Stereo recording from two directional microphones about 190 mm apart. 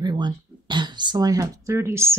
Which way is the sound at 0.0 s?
25° right (ahead or behind).